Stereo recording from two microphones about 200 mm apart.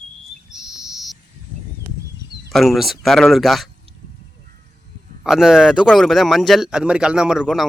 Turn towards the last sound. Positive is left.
turn(degrees=-5)  # may be behind; listen again after turning